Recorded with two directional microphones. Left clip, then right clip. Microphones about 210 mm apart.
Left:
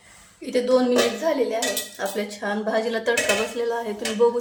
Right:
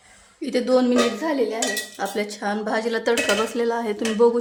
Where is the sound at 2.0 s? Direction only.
45° right (ahead or behind).